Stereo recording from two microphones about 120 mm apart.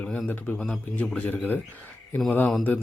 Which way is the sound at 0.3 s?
10° left (ahead or behind).